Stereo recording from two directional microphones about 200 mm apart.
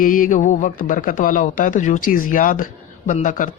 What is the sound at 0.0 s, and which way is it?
A man's voice, 40° left (ahead or behind).